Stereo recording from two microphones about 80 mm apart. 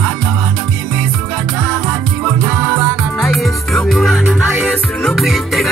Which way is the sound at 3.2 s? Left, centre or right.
Centre.